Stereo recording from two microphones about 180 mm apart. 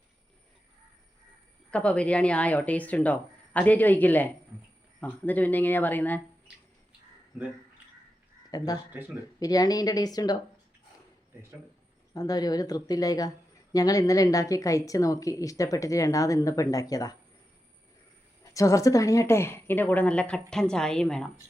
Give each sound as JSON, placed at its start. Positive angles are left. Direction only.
{"t": 1.7, "sound": "speech", "side_deg": 5}
{"t": 8.4, "sound": "speech", "side_deg": 20}
{"t": 8.9, "sound": "speech", "side_deg": -10}
{"t": 9.4, "sound": "a woman's voice", "side_deg": 20}
{"t": 12.1, "sound": "a woman's voice", "side_deg": 20}
{"t": 18.5, "sound": "a woman's voice", "side_deg": 20}